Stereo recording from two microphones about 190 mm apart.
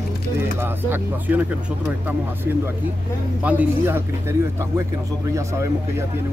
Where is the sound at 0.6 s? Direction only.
10° right (ahead or behind).